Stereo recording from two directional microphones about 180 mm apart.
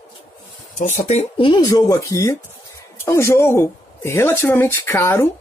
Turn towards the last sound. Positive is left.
turn(degrees=15)  # may be behind; listen again after turning